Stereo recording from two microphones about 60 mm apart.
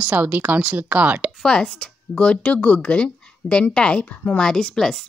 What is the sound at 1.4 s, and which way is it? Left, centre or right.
A woman's voice, centre.